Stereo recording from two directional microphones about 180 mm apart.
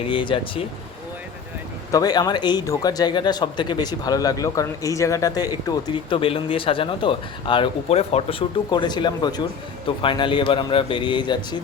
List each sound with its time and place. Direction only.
0.1 s speech: 30° left (ahead or behind)
1.9 s speech: 20° left (ahead or behind)